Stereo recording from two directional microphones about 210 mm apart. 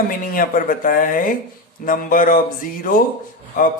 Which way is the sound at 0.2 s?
40° left (ahead or behind).